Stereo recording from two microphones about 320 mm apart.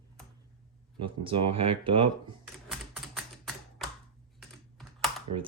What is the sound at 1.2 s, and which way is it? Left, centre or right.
Speech, centre.